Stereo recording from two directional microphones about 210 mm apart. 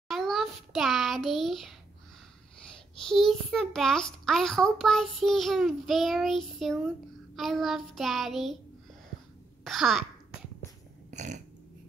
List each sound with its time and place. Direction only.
0.1 s a child's voice: centre (ahead or behind)
3.1 s a child's voice: centre (ahead or behind)
9.7 s a child's voice: centre (ahead or behind)
11.1 s a sound: 35° right (ahead or behind)